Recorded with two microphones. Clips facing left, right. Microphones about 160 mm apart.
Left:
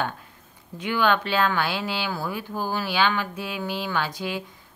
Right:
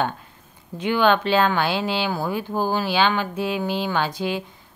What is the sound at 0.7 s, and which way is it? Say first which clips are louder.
Speech: right 4 dB; 25° right (ahead or behind).